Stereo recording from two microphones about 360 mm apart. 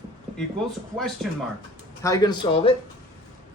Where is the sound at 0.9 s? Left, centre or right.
Centre.